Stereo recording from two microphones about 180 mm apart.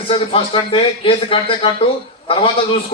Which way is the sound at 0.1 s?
30° left (ahead or behind).